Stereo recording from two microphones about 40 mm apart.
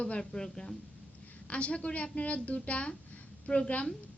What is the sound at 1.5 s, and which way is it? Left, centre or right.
A woman's voice, left.